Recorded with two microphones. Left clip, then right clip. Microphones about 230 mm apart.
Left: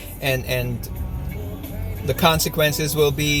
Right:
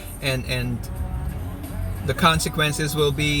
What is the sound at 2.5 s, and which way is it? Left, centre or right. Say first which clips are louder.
Speech: left 3 dB; centre.